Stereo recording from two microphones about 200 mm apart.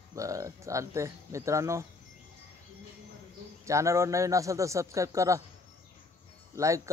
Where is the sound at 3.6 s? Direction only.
15° right (ahead or behind).